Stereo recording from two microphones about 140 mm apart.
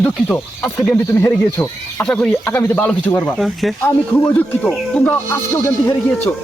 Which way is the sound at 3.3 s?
Centre (ahead or behind).